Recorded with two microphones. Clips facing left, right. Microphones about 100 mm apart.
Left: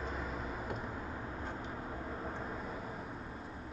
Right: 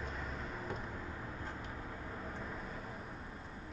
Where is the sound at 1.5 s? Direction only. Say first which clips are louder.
Left 4 dB; 35° left (ahead or behind).